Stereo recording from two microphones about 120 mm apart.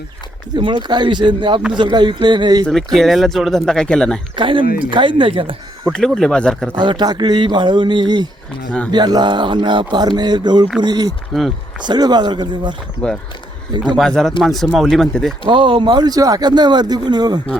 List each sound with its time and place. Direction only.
0.5 s speech: 40° right (ahead or behind)
2.6 s speech: centre (ahead or behind)
4.4 s speech: 45° right (ahead or behind)
5.9 s speech: 5° left (ahead or behind)
6.7 s speech: 40° right (ahead or behind)
11.3 s speech: centre (ahead or behind)
11.8 s speech: 35° right (ahead or behind)
13.0 s speech: 10° left (ahead or behind)
15.4 s speech: 45° right (ahead or behind)